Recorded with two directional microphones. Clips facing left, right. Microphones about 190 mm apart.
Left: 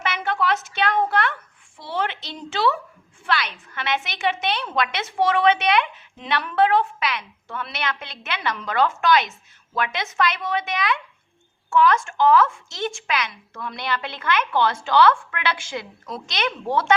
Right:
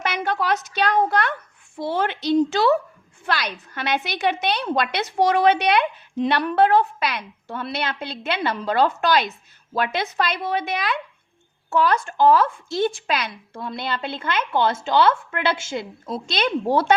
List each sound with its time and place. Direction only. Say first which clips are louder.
0.0 s a woman's voice: even; 40° right (ahead or behind)